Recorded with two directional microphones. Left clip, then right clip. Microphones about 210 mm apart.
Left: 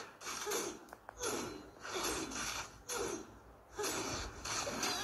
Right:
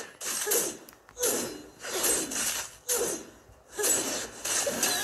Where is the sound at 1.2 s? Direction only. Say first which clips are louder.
Right 10 dB; 40° right (ahead or behind).